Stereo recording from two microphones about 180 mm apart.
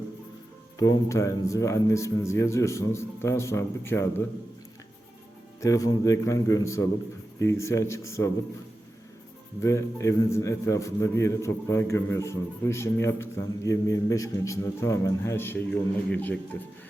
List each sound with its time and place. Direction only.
0.8 s a man's voice: 20° left (ahead or behind)
5.5 s a man's voice: 20° left (ahead or behind)
9.6 s a man's voice: 15° left (ahead or behind)